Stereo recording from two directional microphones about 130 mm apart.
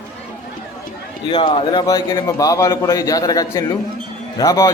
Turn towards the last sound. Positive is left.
turn(degrees=25)  # may be behind; listen again after turning